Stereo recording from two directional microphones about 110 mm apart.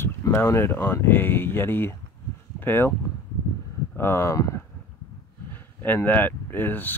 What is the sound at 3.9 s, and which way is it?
Speech, 20° left (ahead or behind).